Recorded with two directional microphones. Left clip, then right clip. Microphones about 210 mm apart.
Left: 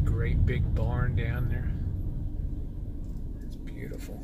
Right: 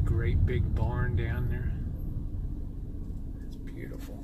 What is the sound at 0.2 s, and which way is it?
Speech, 20° left (ahead or behind).